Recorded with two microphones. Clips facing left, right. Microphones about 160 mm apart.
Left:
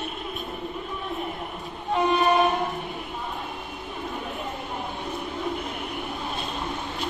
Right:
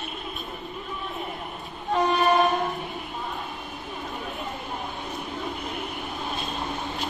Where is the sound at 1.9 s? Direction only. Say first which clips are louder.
Even; 20° left (ahead or behind).